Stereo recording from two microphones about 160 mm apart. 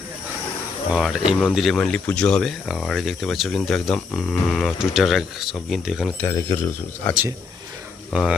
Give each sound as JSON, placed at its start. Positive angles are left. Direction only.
{"t": 0.9, "sound": "speech", "side_deg": 0}
{"t": 6.2, "sound": "speech", "side_deg": 15}
{"t": 8.1, "sound": "speech", "side_deg": -5}